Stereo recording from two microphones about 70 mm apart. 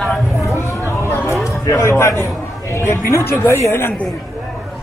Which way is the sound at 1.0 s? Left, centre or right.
Left.